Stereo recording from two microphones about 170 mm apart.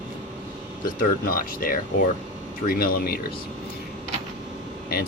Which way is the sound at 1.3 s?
55° left (ahead or behind).